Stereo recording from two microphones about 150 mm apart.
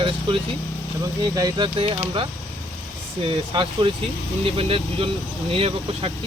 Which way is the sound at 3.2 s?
35° right (ahead or behind).